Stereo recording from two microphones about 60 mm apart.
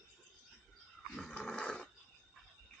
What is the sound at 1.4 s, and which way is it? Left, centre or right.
Dog, centre.